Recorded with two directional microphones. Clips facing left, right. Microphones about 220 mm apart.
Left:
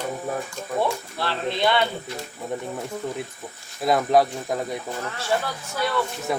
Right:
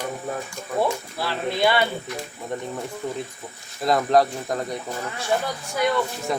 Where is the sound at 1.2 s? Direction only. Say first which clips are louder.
Right 1 dB; 10° right (ahead or behind).